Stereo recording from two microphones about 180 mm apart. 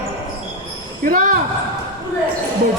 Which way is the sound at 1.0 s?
45° right (ahead or behind).